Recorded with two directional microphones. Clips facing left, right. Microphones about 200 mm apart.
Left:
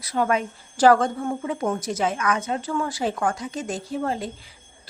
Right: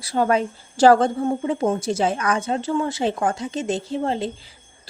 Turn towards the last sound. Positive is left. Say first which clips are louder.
# right 3 dB
turn(degrees=-25)  # may be behind; listen again after turning